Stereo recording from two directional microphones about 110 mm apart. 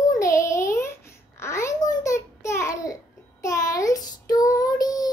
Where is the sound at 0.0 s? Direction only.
30° left (ahead or behind).